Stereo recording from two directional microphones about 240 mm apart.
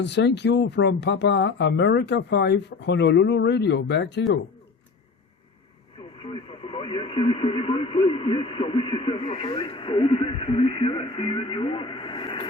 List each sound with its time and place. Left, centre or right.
0.0 s speech: left
6.0 s speech: left